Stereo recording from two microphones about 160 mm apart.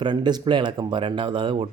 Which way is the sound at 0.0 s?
25° right (ahead or behind).